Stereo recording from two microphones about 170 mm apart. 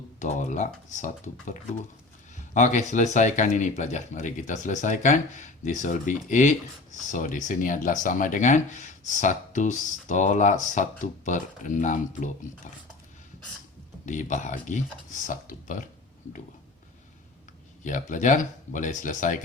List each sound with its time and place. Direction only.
0.2 s speech: 45° left (ahead or behind)
14.0 s speech: 45° left (ahead or behind)
17.8 s speech: 50° left (ahead or behind)